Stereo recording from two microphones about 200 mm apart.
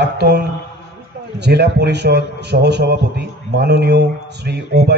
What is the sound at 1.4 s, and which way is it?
A man's voice, 55° right (ahead or behind).